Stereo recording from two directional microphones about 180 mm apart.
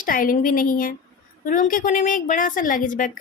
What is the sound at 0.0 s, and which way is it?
A woman's voice, 50° left (ahead or behind).